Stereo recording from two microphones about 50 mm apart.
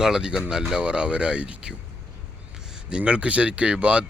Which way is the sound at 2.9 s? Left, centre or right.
Right.